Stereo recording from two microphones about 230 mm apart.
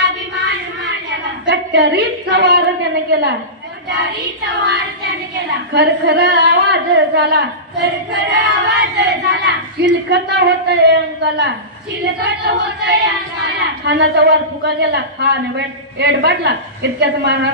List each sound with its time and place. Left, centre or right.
1.4 s a woman's voice: right
5.7 s speech: right
13.6 s speech: right